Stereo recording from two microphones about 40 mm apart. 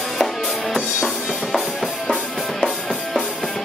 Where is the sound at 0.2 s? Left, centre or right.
Centre.